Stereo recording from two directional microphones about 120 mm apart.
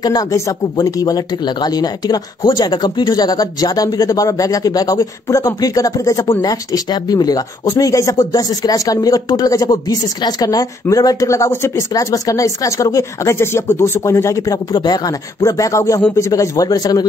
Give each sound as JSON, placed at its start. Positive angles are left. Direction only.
{"t": 0.0, "sound": "speech", "side_deg": 30}